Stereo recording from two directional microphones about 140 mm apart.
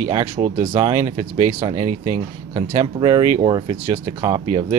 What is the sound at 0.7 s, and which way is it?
Speech, 25° right (ahead or behind).